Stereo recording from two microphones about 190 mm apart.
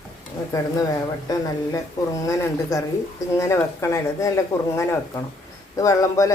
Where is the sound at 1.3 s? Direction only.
15° left (ahead or behind).